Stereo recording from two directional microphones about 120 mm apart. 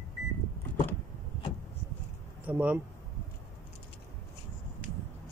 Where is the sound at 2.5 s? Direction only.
10° right (ahead or behind).